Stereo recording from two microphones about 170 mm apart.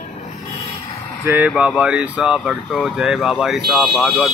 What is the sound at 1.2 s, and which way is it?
Speech, 10° right (ahead or behind).